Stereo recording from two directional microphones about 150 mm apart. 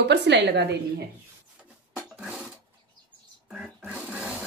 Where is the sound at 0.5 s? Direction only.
90° right.